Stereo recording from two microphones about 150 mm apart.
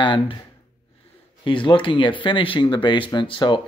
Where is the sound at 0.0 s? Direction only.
35° left (ahead or behind).